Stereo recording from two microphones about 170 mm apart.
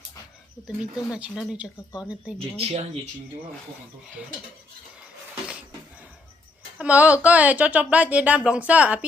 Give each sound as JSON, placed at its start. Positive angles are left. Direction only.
{"t": 1.3, "sound": "speech", "side_deg": -5}
{"t": 2.6, "sound": "speech", "side_deg": -35}
{"t": 6.7, "sound": "speech", "side_deg": -10}